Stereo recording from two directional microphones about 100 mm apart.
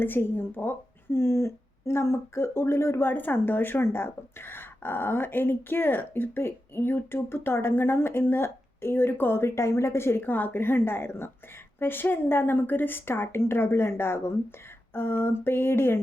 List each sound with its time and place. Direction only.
0.0 s speech: 20° left (ahead or behind)